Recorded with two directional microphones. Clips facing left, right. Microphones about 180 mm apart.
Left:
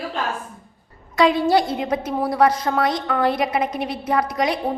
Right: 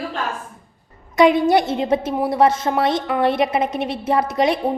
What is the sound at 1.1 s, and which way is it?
A woman's voice, 20° right (ahead or behind).